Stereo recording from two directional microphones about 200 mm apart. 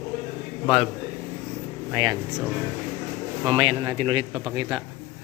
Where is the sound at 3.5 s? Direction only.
25° right (ahead or behind).